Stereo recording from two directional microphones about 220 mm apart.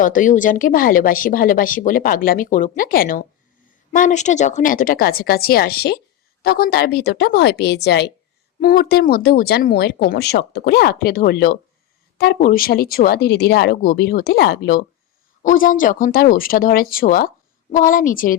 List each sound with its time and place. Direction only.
0.0 s speech: 35° left (ahead or behind)